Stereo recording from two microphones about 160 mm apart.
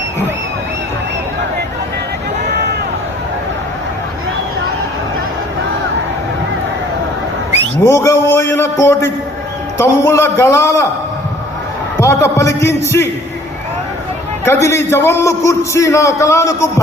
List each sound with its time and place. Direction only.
7.9 s a man's voice: 20° left (ahead or behind)
11.9 s a man's voice: 20° left (ahead or behind)
14.4 s a man's voice: 15° left (ahead or behind)